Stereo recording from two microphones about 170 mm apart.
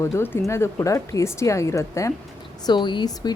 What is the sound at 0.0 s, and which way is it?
Speech, 15° left (ahead or behind).